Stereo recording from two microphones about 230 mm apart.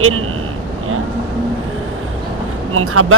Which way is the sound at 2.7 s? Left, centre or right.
Right.